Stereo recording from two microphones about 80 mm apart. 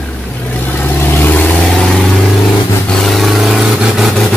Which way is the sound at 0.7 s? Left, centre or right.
Left.